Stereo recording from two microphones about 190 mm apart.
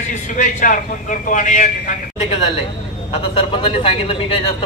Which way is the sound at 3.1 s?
30° left (ahead or behind).